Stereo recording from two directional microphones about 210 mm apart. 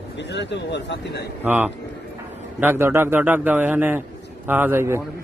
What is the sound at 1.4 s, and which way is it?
A man's voice, 10° right (ahead or behind).